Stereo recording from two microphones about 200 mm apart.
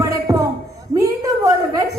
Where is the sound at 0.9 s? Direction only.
15° right (ahead or behind).